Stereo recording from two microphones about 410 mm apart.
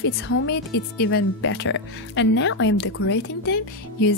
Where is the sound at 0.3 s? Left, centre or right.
Left.